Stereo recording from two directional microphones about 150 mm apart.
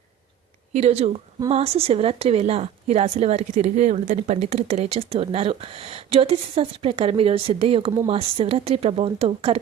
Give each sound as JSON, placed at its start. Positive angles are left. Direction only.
{"t": 0.7, "sound": "a woman's voice", "side_deg": -45}